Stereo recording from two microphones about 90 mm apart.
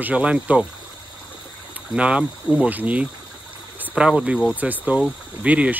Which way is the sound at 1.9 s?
15° right (ahead or behind).